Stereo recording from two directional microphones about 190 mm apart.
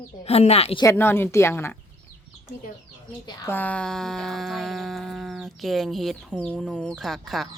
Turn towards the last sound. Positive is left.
turn(degrees=0)  # may be behind; listen again after turning